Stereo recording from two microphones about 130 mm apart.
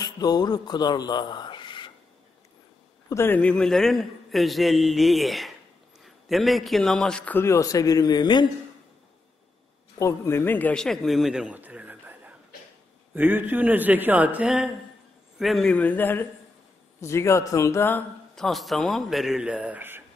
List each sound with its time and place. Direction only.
0.0 s speech: 30° left (ahead or behind)
3.1 s a man's voice: 15° left (ahead or behind); by 8.5 s 35° left (ahead or behind)
9.9 s a man's voice: 20° left (ahead or behind)
18.3 s a man's voice: centre (ahead or behind); by 20.0 s 15° right (ahead or behind)